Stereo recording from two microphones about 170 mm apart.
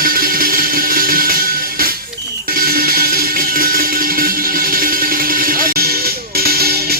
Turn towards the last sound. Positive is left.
turn(degrees=-65)  # may be behind; listen again after turning